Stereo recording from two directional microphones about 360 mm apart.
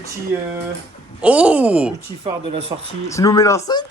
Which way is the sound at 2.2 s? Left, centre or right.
Centre.